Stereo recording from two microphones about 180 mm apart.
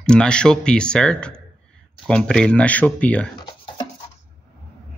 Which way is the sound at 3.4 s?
25° left (ahead or behind).